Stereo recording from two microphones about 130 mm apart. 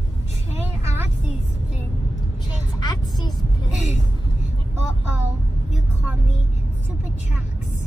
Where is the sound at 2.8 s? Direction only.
35° left (ahead or behind).